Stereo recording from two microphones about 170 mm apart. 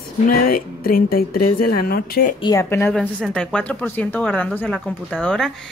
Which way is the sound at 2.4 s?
15° left (ahead or behind).